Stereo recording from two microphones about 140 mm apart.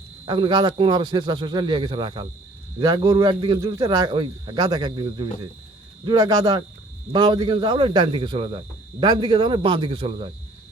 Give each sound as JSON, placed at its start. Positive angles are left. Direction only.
{"t": 0.3, "sound": "a man's voice", "side_deg": -35}